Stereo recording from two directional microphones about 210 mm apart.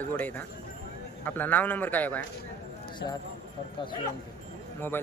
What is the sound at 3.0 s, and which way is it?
Speech, 55° left (ahead or behind).